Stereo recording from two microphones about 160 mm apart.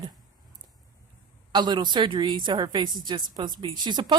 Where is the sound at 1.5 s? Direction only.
25° right (ahead or behind).